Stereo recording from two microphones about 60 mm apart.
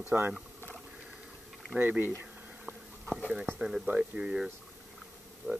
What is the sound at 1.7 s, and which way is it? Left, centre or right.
Speech, right.